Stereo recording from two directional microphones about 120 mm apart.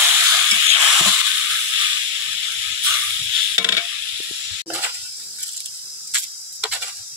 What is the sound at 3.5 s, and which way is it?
Stir, 15° right (ahead or behind).